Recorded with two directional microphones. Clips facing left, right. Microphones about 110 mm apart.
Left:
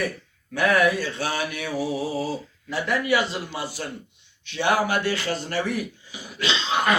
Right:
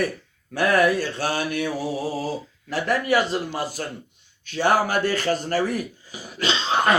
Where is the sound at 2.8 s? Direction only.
40° right (ahead or behind).